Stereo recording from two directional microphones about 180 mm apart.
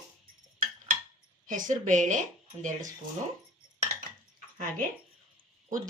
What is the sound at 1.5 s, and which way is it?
A woman's voice, 45° right (ahead or behind).